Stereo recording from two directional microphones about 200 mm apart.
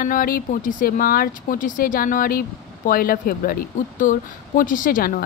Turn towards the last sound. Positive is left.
turn(degrees=45)  # may be behind; listen again after turning